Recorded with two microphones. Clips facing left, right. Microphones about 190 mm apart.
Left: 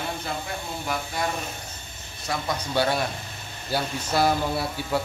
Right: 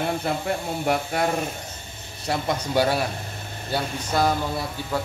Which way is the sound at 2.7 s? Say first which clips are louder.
Right 2 dB; 10° right (ahead or behind).